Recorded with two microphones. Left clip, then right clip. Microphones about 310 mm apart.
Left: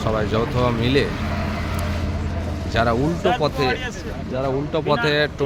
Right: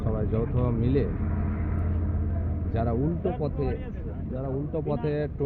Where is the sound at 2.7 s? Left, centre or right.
Centre.